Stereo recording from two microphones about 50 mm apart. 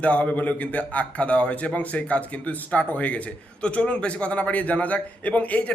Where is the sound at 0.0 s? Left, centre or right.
Left.